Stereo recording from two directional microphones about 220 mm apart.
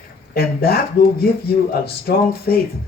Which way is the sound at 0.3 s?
45° left (ahead or behind).